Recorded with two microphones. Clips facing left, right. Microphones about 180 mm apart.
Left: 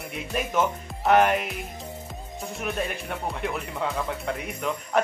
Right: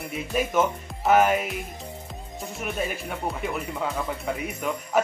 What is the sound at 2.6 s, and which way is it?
Music, centre (ahead or behind).